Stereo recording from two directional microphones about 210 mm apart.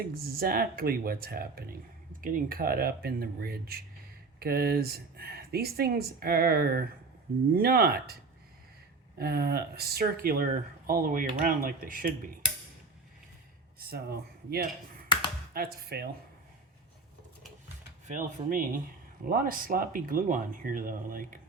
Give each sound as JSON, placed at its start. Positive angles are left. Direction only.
{"t": 0.0, "sound": "speech", "side_deg": -45}
{"t": 9.1, "sound": "speech", "side_deg": -45}
{"t": 13.7, "sound": "speech", "side_deg": -50}
{"t": 18.1, "sound": "speech", "side_deg": -40}